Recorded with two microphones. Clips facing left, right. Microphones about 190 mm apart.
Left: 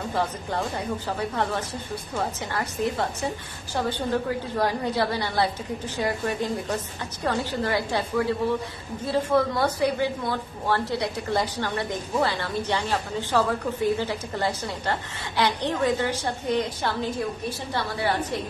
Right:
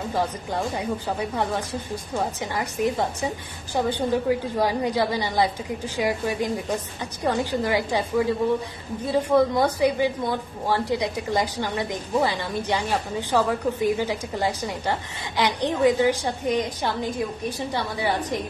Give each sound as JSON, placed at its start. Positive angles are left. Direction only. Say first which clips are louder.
{"t": 0.7, "sound": "a woman's voice", "louder": "right 2 dB", "side_deg": -15}